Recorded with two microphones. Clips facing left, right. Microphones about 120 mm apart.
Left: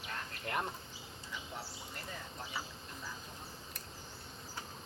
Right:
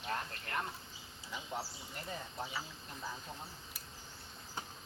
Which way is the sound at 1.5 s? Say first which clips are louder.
Right 6 dB; 20° right (ahead or behind).